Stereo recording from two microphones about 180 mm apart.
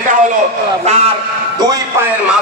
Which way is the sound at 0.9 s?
35° right (ahead or behind).